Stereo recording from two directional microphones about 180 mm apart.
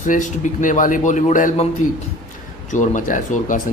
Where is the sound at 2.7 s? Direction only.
45° left (ahead or behind).